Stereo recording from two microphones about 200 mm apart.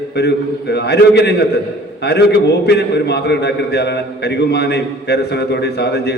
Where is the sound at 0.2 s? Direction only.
55° left (ahead or behind).